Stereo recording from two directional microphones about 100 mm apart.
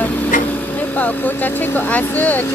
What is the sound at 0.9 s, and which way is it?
Speech, 15° left (ahead or behind).